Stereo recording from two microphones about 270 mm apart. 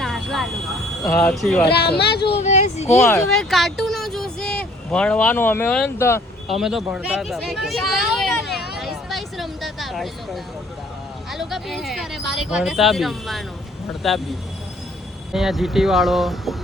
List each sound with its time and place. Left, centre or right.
0.0 s vehicle: centre
1.0 s speech: centre
1.7 s speech: left
2.3 s speech: left
3.0 s speech: centre
6.6 s speech: centre
8.8 s a sound: centre
11.3 s speech: centre
15.3 s speech: centre